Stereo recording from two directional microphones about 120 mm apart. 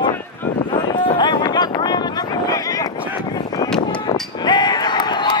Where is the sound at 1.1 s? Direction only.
40° left (ahead or behind).